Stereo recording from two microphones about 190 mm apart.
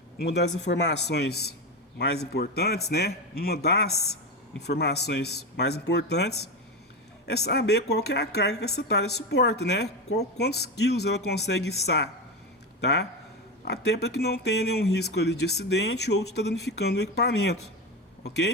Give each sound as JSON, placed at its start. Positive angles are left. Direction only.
{"t": 0.2, "sound": "speech", "side_deg": 60}